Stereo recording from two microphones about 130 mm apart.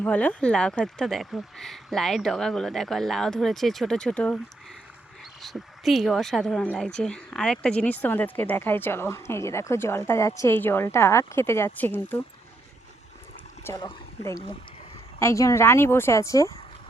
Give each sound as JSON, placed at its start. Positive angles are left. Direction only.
{"t": 0.0, "sound": "speech", "side_deg": 10}
{"t": 5.4, "sound": "speech", "side_deg": 0}
{"t": 13.7, "sound": "speech", "side_deg": 30}